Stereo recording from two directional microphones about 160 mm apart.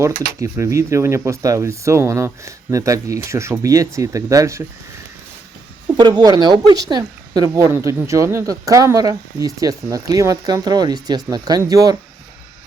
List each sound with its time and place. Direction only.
0.3 s speech: 20° right (ahead or behind)
5.9 s speech: 25° right (ahead or behind)